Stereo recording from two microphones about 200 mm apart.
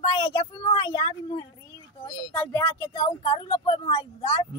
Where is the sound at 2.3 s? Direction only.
10° left (ahead or behind).